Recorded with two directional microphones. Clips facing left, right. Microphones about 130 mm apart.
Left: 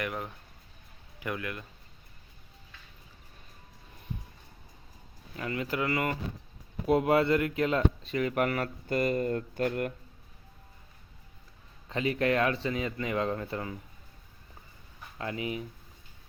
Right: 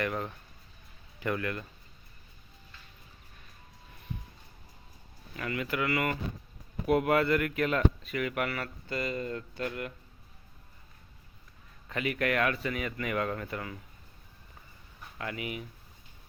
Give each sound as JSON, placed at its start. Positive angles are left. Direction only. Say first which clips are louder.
{"t": 0.0, "sound": "speech", "louder": "right 2 dB", "side_deg": 10}
{"t": 5.4, "sound": "speech", "louder": "left 1 dB", "side_deg": 30}
{"t": 11.9, "sound": "speech", "louder": "left 3 dB", "side_deg": 30}
{"t": 15.2, "sound": "speech", "louder": "left 3 dB", "side_deg": 30}